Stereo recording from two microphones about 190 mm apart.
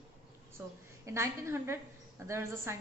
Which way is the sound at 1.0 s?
15° right (ahead or behind).